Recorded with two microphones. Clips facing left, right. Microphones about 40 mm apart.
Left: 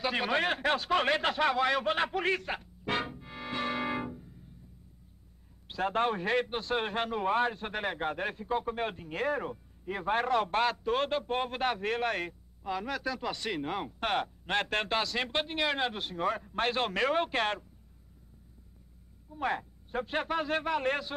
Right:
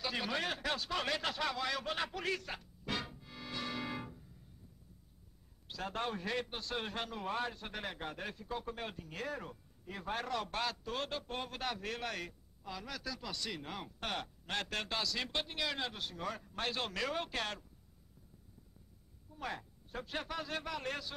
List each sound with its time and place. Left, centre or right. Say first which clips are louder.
0.0 s speech: left 8 dB; left
5.7 s a man's voice: left 10 dB; left
19.3 s a man's voice: left 10 dB; left